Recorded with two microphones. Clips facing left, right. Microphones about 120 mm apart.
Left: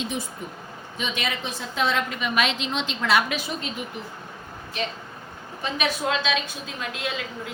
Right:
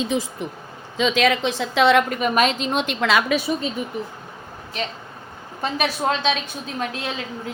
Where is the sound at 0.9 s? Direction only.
90° right; by 3.2 s 75° right (ahead or behind).